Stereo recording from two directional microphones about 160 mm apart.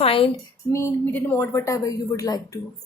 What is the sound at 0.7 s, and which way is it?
Speech, 15° left (ahead or behind).